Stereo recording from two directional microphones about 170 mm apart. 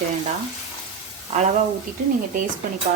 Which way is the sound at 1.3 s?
45° right (ahead or behind).